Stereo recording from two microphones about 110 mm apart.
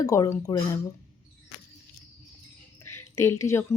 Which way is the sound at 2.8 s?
25° left (ahead or behind).